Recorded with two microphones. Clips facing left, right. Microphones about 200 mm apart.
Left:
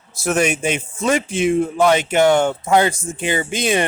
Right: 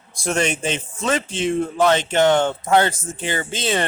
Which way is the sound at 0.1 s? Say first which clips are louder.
Left 3 dB; 5° left (ahead or behind).